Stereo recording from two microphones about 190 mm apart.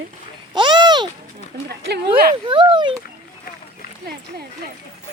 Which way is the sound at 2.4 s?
25° right (ahead or behind).